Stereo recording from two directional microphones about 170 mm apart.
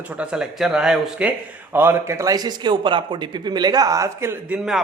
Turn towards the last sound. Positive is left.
turn(degrees=-5)  # may be behind; listen again after turning